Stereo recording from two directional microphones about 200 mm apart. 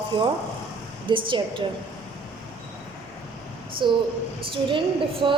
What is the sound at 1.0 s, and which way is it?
Speech, 25° right (ahead or behind).